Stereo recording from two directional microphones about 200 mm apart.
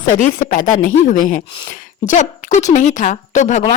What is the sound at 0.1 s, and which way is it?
Speech, 40° left (ahead or behind).